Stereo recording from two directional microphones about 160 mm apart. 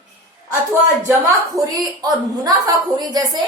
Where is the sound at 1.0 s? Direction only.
20° right (ahead or behind).